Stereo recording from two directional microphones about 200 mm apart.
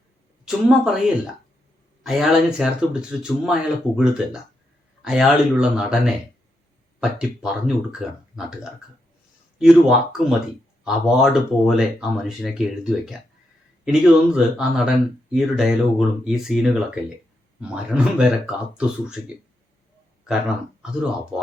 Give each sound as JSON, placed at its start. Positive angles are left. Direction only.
{"t": 0.4, "sound": "speech", "side_deg": -5}
{"t": 9.6, "sound": "speech", "side_deg": 0}
{"t": 21.3, "sound": "speech", "side_deg": -5}